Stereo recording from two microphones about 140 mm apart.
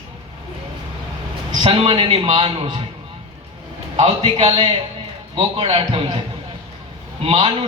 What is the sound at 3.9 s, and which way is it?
A man's voice, 50° right (ahead or behind).